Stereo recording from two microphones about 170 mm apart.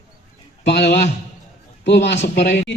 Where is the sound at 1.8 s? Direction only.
90° left.